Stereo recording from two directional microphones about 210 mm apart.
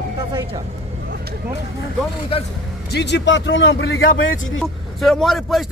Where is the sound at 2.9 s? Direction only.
55° left (ahead or behind).